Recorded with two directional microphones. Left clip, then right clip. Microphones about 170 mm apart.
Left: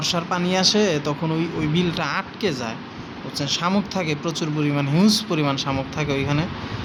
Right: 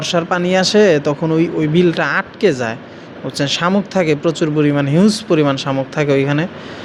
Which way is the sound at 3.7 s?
20° right (ahead or behind).